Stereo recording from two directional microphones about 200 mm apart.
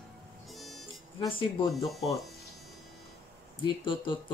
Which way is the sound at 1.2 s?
25° left (ahead or behind).